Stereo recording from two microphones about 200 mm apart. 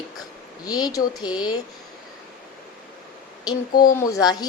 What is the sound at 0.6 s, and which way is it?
A woman's voice, 20° left (ahead or behind).